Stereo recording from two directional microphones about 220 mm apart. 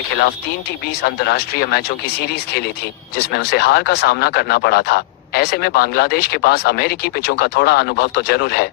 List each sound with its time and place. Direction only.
0.1 s speech: 50° left (ahead or behind)